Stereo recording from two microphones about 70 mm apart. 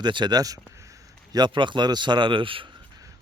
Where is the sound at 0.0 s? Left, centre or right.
Right.